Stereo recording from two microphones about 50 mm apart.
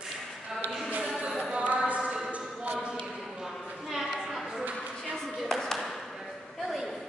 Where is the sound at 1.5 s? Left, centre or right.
Right.